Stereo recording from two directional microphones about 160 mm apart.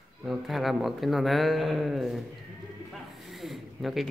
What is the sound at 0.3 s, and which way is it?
Speech, centre (ahead or behind).